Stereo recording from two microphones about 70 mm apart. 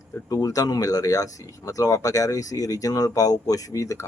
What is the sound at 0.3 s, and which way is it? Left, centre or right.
Speech, left.